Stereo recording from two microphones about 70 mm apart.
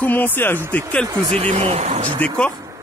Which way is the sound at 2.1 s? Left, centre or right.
Centre.